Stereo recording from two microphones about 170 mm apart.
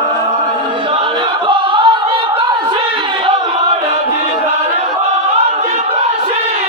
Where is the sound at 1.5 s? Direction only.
30° right (ahead or behind).